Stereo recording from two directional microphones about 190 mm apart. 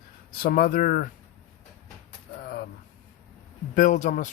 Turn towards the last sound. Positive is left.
turn(degrees=40)  # may be behind; listen again after turning